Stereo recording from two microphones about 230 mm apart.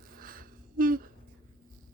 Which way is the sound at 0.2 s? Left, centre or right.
Right.